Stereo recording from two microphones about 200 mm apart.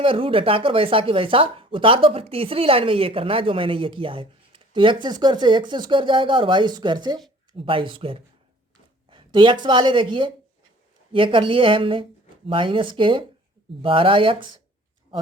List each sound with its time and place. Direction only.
0.0 s speech: 25° right (ahead or behind)